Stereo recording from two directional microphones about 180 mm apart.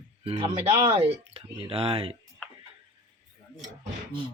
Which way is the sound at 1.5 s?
30° right (ahead or behind).